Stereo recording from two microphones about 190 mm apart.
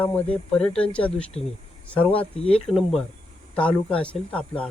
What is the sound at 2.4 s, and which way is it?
Speech, 30° left (ahead or behind).